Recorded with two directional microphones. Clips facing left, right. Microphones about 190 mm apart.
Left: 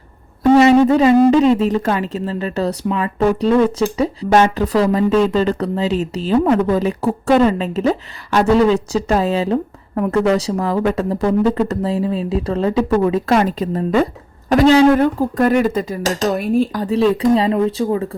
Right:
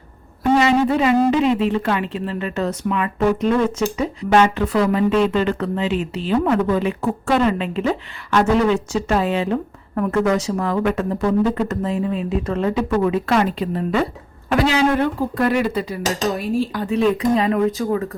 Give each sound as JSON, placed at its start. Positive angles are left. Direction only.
{"t": 0.6, "sound": "speech", "side_deg": 30}
{"t": 16.4, "sound": "speech", "side_deg": 55}
{"t": 16.8, "sound": "speech", "side_deg": 30}